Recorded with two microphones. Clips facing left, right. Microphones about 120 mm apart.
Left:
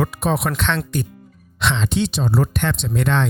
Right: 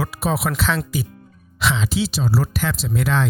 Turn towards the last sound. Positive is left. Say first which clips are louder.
# left 1 dB
turn(degrees=-5)  # may be behind; listen again after turning